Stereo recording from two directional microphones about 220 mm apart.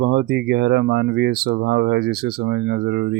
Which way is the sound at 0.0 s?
50° right (ahead or behind).